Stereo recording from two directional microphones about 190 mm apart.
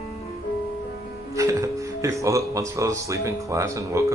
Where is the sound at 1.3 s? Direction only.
15° right (ahead or behind).